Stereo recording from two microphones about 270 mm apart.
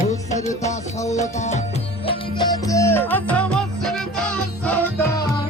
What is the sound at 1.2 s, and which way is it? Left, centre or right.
Music, left.